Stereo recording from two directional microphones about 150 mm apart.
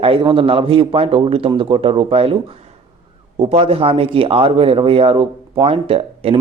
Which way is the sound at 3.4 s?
40° right (ahead or behind).